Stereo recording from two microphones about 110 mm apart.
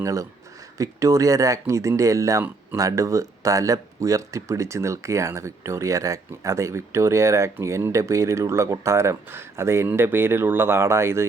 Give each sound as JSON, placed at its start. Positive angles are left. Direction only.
{"t": 0.0, "sound": "speech", "side_deg": -30}